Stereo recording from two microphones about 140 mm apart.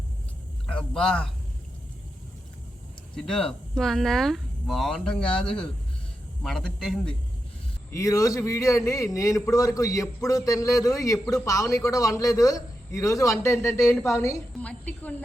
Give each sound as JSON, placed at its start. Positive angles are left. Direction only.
{"t": 0.7, "sound": "a man's voice", "side_deg": 5}
{"t": 3.2, "sound": "speech", "side_deg": 5}
{"t": 7.9, "sound": "a man's voice", "side_deg": 25}
{"t": 14.6, "sound": "a woman's voice", "side_deg": 10}